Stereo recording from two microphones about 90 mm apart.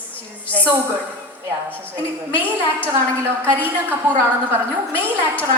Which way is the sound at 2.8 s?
25° right (ahead or behind).